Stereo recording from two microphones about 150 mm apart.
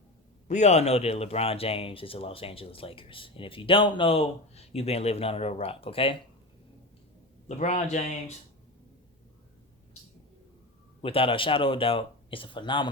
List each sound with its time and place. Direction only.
0.4 s speech: 50° left (ahead or behind)
7.4 s a man's voice: 50° left (ahead or behind)
11.0 s speech: 40° left (ahead or behind)